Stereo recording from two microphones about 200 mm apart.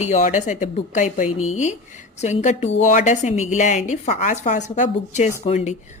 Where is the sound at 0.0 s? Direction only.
35° left (ahead or behind).